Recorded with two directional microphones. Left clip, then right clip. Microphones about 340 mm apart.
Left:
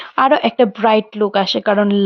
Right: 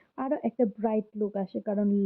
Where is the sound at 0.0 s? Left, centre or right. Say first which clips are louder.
Left 18 dB; centre.